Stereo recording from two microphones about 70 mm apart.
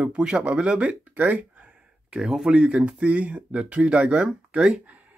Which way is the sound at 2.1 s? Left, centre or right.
Centre.